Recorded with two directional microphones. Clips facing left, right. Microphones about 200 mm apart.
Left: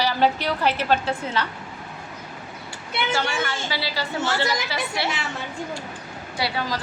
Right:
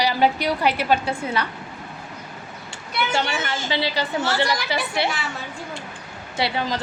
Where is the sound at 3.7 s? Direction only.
20° right (ahead or behind).